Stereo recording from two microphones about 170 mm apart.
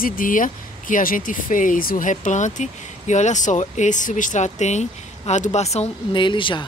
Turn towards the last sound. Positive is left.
turn(degrees=30)  # may be behind; listen again after turning